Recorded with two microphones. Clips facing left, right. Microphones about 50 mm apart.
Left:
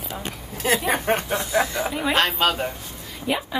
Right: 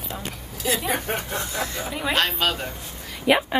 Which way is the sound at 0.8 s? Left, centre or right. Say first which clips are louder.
Left 4 dB; left.